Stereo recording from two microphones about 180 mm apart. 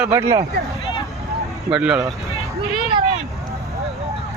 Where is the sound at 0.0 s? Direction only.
10° right (ahead or behind).